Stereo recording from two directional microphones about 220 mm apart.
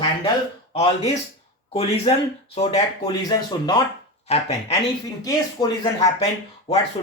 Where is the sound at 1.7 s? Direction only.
25° left (ahead or behind).